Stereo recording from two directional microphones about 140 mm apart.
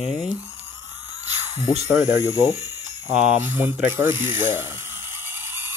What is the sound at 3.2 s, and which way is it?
Speech, 10° right (ahead or behind).